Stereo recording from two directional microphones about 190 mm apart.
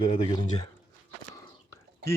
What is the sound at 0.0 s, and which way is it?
Speech, 25° left (ahead or behind).